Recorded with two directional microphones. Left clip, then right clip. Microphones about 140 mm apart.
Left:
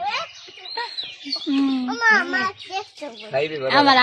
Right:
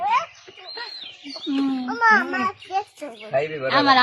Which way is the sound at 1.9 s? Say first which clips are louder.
Even; 30° left (ahead or behind).